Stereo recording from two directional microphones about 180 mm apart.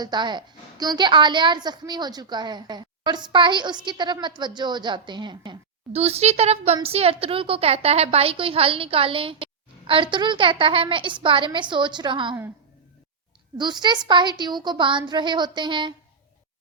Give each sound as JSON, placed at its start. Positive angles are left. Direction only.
{"t": 0.0, "sound": "a woman's voice", "side_deg": -25}
{"t": 13.6, "sound": "a woman's voice", "side_deg": -25}